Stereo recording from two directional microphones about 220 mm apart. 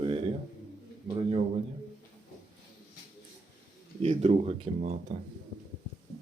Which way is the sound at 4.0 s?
30° right (ahead or behind).